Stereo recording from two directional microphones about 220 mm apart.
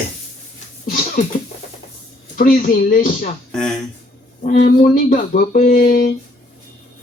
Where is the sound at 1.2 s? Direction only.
40° left (ahead or behind).